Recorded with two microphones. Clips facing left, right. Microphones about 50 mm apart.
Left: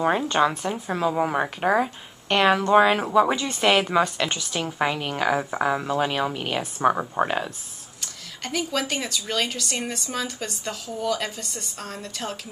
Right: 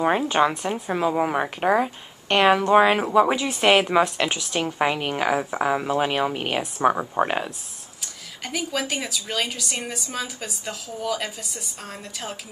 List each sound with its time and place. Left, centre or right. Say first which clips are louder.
0.0 s a woman's voice: right 1 dB; centre
6.6 s a woman's voice: even; centre
7.2 s a woman's voice: right 1 dB; centre